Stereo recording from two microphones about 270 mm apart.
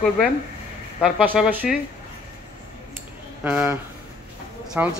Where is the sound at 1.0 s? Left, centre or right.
Centre.